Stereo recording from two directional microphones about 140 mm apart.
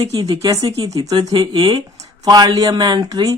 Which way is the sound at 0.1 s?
25° right (ahead or behind).